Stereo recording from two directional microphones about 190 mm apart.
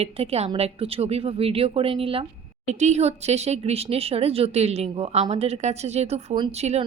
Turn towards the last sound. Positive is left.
turn(degrees=-35)  # may be behind; listen again after turning